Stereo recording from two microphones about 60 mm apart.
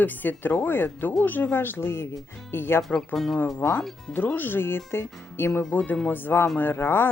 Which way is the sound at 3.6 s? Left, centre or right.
Left.